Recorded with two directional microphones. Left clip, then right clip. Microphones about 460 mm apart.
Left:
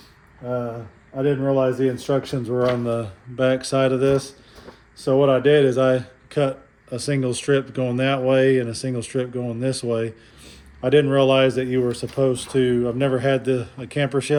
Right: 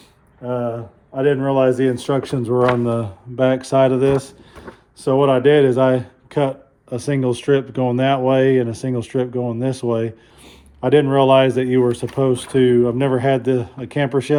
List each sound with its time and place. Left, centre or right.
1.5 s speech: centre
2.2 s speech: centre
4.6 s a sound: right
5.2 s speech: centre